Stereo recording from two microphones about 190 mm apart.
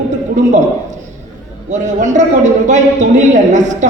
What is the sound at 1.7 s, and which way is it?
A woman's voice, 40° right (ahead or behind).